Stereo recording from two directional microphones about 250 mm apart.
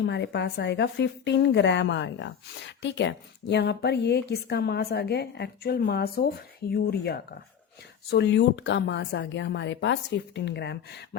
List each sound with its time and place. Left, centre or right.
0.0 s a woman's voice: left